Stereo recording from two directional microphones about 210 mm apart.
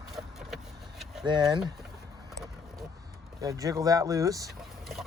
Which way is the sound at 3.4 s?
15° right (ahead or behind).